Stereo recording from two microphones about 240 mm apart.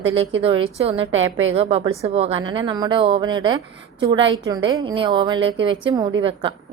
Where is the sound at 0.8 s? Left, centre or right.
Right.